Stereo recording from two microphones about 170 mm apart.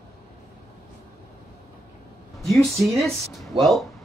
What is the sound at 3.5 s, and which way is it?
Speech, 30° right (ahead or behind).